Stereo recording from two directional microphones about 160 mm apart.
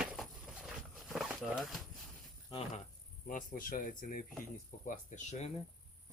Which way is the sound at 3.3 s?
55° left (ahead or behind).